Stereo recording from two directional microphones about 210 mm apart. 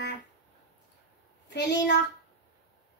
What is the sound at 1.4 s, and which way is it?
Speech, 55° left (ahead or behind).